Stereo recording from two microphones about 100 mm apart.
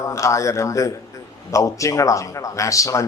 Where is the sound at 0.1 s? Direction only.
30° left (ahead or behind).